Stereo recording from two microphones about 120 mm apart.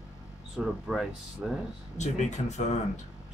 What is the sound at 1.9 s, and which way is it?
Speech, 75° left (ahead or behind).